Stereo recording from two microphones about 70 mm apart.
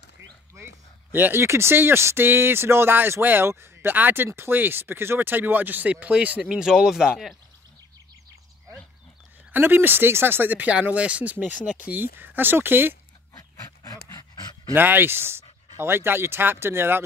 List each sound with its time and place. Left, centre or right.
1.1 s speech: right; by 7.3 s centre
9.5 s speech: right
13.4 s dog: left
14.7 s speech: right